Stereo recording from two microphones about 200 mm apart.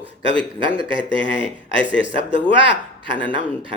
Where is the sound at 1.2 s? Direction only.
65° left (ahead or behind).